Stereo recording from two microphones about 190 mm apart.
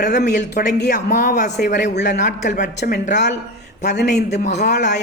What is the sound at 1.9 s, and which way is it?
Speech, 60° left (ahead or behind).